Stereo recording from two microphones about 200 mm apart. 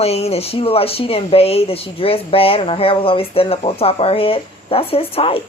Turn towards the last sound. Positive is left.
turn(degrees=30)  # may be behind; listen again after turning